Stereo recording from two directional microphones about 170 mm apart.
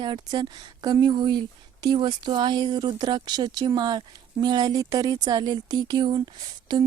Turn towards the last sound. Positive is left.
turn(degrees=-25)  # may be behind; listen again after turning